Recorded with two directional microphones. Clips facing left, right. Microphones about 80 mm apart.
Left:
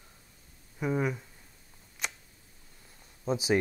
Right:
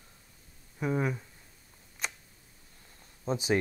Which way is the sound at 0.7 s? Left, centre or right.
Centre.